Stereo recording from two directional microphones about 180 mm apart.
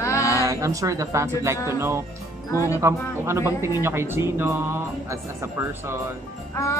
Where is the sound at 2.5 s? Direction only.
15° left (ahead or behind).